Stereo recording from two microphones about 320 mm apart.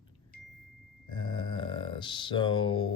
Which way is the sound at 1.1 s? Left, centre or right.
Centre.